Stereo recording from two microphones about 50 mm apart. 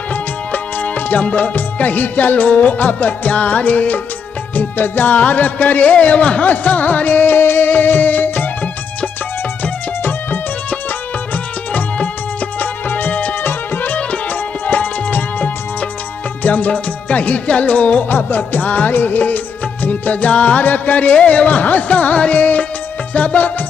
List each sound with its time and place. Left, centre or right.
0.1 s music: left
4.6 s music: left
6.4 s music: left
7.3 s music: left
12.5 s music: left
18.1 s music: left